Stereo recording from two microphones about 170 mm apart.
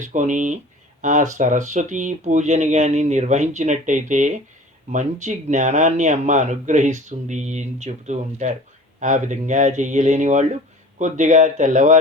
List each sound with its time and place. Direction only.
0.0 s speech: 45° right (ahead or behind)